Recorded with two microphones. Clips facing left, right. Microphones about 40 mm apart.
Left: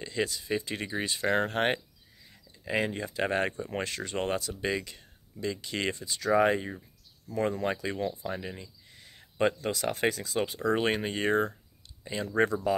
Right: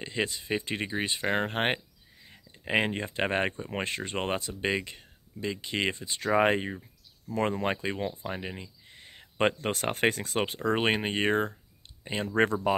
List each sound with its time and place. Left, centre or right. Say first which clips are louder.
0.0 s speech: even; right
2.2 s speech: right 1 dB; right
10.6 s speech: right 1 dB; right